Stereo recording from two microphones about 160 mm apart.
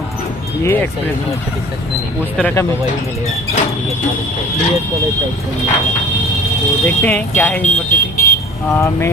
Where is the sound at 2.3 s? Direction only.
10° left (ahead or behind).